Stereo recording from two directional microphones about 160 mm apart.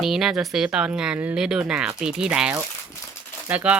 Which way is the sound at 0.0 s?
Centre (ahead or behind).